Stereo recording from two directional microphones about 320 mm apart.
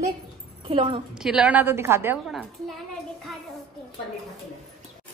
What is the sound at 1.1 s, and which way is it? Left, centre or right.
A woman's voice, centre.